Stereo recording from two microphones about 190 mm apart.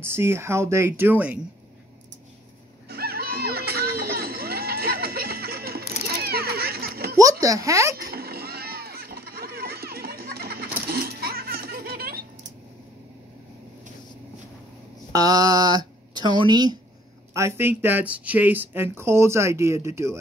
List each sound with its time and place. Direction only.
0.0 s speech: 10° right (ahead or behind)
2.9 s music: 55° right (ahead or behind)
7.2 s speech: 15° right (ahead or behind)
8.0 s a sound: 55° right (ahead or behind)
10.9 s laughter: 55° right (ahead or behind)
15.1 s speech: 20° right (ahead or behind)